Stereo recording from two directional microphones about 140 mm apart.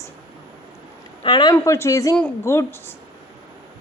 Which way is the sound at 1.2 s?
30° left (ahead or behind).